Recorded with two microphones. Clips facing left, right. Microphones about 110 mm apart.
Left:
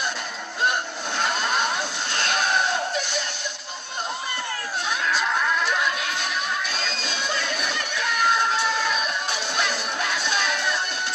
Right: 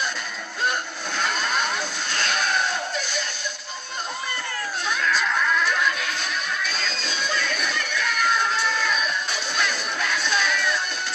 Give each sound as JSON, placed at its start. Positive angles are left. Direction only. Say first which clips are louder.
{"t": 1.2, "sound": "vehicle", "louder": "left 1 dB", "side_deg": 20}
{"t": 2.1, "sound": "sheep", "louder": "left 1 dB", "side_deg": 20}
{"t": 6.7, "sound": "a sound", "louder": "even", "side_deg": 20}